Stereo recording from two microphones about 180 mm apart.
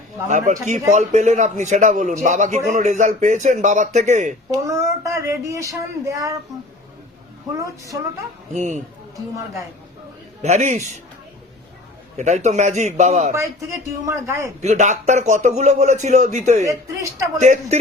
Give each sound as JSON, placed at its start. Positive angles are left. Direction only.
{"t": 0.3, "sound": "a man's voice", "side_deg": -45}
{"t": 4.5, "sound": "speech", "side_deg": -20}
{"t": 7.5, "sound": "speech", "side_deg": -20}
{"t": 8.5, "sound": "a man's voice", "side_deg": -40}
{"t": 10.4, "sound": "a man's voice", "side_deg": -40}
{"t": 12.1, "sound": "a man's voice", "side_deg": -40}
{"t": 13.3, "sound": "speech", "side_deg": -15}
{"t": 14.6, "sound": "a man's voice", "side_deg": -40}
{"t": 16.6, "sound": "speech", "side_deg": -15}
{"t": 17.4, "sound": "a man's voice", "side_deg": -40}